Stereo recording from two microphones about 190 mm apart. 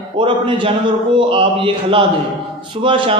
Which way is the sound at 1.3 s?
25° right (ahead or behind).